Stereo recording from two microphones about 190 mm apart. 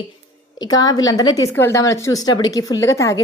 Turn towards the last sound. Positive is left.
turn(degrees=15)  # may be behind; listen again after turning